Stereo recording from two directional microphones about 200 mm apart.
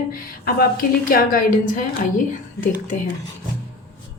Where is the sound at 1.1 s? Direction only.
45° left (ahead or behind).